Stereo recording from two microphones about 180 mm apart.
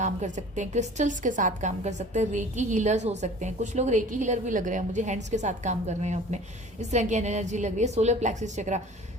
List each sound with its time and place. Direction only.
0.0 s a woman's voice: 40° right (ahead or behind)